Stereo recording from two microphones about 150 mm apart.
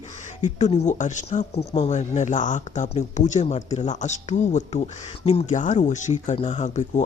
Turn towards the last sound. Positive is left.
turn(degrees=50)  # may be behind; listen again after turning